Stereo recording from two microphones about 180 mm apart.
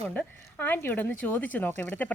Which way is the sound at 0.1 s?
10° left (ahead or behind).